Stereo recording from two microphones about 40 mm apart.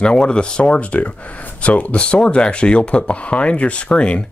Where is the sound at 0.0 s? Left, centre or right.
Left.